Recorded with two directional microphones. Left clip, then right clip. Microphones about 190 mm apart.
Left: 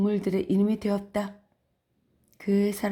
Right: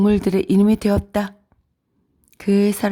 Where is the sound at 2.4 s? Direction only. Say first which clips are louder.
Right 8 dB; 25° right (ahead or behind).